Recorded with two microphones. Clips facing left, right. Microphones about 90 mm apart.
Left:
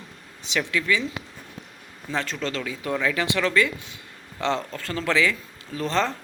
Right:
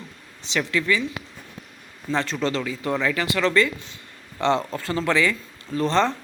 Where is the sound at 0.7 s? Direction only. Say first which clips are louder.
Right 2 dB; 5° left (ahead or behind).